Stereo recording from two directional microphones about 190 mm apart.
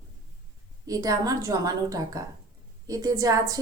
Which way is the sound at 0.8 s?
20° right (ahead or behind).